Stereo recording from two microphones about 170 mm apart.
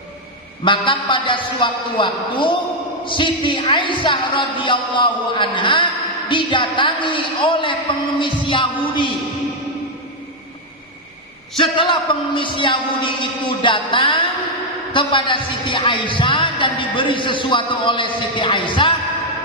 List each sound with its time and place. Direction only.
0.6 s a woman's voice: 30° left (ahead or behind)
11.5 s a woman's voice: 30° left (ahead or behind)